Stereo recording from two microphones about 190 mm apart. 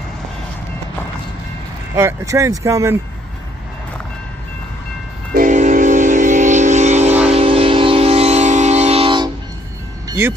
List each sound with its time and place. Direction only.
2.0 s speech: 15° right (ahead or behind)
5.3 s train: 45° right (ahead or behind); by 9.3 s 25° right (ahead or behind)
10.0 s music: 15° right (ahead or behind)